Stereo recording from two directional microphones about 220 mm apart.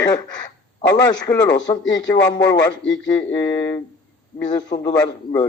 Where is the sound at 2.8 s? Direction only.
60° left (ahead or behind).